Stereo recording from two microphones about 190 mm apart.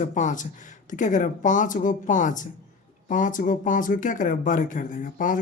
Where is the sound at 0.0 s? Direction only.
40° left (ahead or behind).